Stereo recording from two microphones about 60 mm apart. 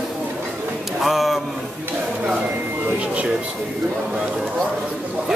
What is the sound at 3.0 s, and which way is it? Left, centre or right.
Speech, right.